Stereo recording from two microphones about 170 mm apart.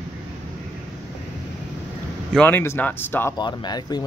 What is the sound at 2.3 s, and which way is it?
Speech, 10° left (ahead or behind).